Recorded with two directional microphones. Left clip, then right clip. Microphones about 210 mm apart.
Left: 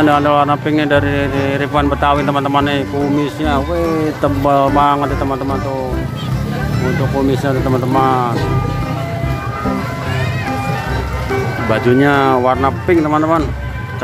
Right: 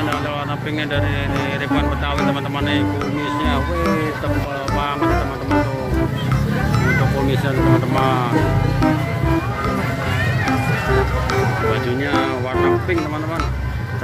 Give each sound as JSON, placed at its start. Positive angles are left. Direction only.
{"t": 0.0, "sound": "speech", "side_deg": 30}
{"t": 4.6, "sound": "speech", "side_deg": 30}
{"t": 7.2, "sound": "speech", "side_deg": 20}
{"t": 11.7, "sound": "speech", "side_deg": 30}